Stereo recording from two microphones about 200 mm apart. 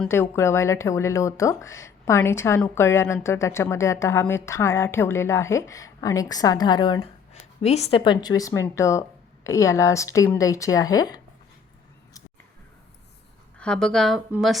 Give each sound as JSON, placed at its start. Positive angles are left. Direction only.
{"t": 0.0, "sound": "a woman's voice", "side_deg": 10}
{"t": 13.6, "sound": "a woman's voice", "side_deg": 5}